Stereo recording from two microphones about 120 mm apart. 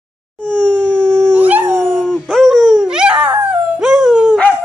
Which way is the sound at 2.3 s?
Centre (ahead or behind).